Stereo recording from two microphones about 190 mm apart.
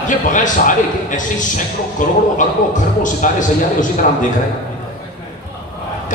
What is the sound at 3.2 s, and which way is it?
A man's voice, 45° left (ahead or behind).